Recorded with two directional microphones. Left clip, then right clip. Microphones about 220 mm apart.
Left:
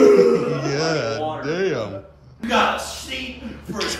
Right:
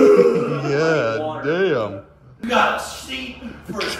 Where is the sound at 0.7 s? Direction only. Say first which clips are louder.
Right 7 dB; 10° left (ahead or behind).